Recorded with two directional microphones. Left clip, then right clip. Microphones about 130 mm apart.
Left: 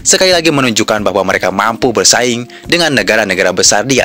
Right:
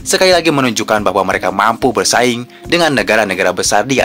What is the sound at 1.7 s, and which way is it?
Speech, 30° left (ahead or behind).